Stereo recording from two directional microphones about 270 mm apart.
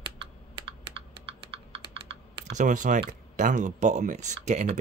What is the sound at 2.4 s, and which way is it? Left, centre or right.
A man's voice, right.